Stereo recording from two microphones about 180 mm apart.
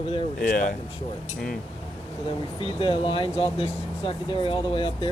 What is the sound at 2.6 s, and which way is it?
Speech, 30° left (ahead or behind).